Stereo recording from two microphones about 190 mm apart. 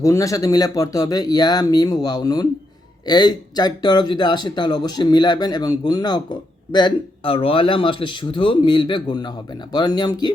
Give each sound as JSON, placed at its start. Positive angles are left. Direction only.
{"t": 0.0, "sound": "speech", "side_deg": 15}